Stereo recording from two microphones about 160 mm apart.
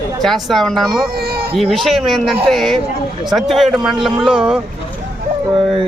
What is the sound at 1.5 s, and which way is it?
Speech, centre (ahead or behind).